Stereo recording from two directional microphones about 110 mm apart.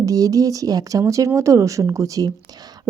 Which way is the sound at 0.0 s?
30° right (ahead or behind).